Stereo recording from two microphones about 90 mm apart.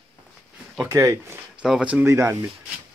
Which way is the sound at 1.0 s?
35° right (ahead or behind).